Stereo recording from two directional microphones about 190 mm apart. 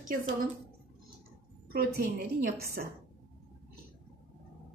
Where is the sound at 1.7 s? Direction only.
50° right (ahead or behind).